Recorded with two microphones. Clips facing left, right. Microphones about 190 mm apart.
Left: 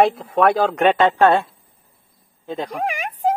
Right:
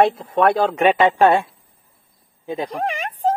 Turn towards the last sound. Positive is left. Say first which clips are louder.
# even
turn(degrees=10)  # may be behind; listen again after turning